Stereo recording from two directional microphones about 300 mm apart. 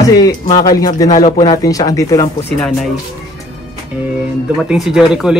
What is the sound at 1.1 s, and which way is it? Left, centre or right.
Speech, left.